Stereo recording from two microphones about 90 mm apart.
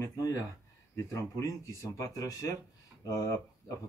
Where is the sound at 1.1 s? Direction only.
35° left (ahead or behind).